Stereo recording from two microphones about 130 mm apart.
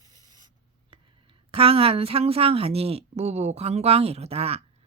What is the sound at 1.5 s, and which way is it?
A woman's voice, 45° right (ahead or behind).